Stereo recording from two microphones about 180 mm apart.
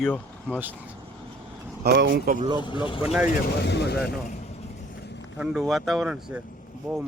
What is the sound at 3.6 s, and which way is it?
Speech, 70° left (ahead or behind).